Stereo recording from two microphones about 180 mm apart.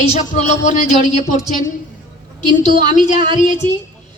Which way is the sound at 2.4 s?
25° right (ahead or behind).